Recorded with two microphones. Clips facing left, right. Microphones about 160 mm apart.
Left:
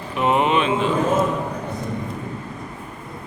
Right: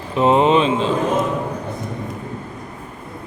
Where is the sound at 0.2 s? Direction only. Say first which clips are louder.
Right 5 dB; 30° right (ahead or behind).